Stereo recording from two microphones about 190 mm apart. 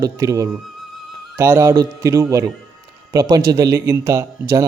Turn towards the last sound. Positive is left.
turn(degrees=-15)  # may be behind; listen again after turning